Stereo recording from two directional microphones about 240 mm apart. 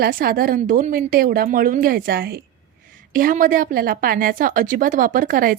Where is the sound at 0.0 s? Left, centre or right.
Right.